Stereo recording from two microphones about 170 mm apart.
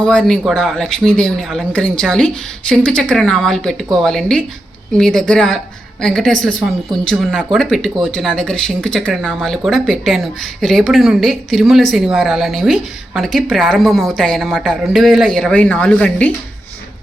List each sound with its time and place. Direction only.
0.0 s speech: 5° left (ahead or behind)